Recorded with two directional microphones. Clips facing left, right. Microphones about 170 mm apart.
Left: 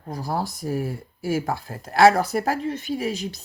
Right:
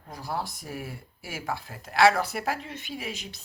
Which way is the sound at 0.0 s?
40° left (ahead or behind).